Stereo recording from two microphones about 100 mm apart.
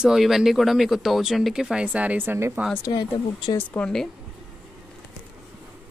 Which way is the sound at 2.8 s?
45° left (ahead or behind).